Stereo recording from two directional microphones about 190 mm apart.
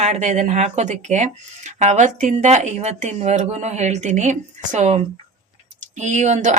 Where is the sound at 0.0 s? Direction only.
35° right (ahead or behind).